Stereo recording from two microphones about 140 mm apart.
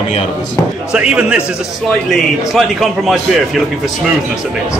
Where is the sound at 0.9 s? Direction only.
5° right (ahead or behind).